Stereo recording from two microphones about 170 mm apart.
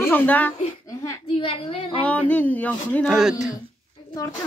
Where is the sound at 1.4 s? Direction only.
30° left (ahead or behind).